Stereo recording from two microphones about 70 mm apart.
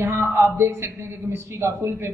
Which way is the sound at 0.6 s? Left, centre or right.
Right.